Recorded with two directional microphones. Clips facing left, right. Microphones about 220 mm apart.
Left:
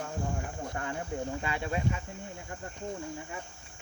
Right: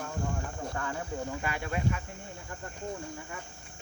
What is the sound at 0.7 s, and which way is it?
Cricket, 25° left (ahead or behind).